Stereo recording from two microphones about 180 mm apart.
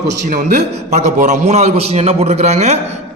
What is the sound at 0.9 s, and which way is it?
A man's voice, 40° right (ahead or behind).